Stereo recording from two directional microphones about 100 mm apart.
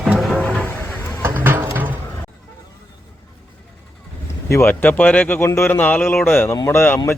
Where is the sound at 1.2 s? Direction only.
20° right (ahead or behind).